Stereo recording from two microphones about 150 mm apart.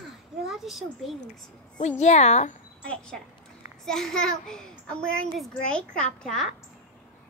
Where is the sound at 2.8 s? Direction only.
10° left (ahead or behind).